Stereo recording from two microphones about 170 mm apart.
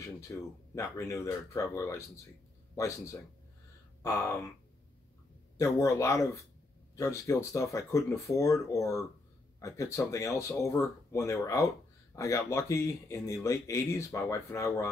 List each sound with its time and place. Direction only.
0.0 s speech: 20° left (ahead or behind)
5.6 s speech: 15° left (ahead or behind)